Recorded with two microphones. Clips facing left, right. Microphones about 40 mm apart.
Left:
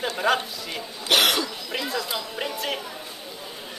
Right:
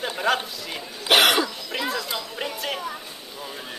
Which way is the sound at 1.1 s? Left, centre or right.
Centre.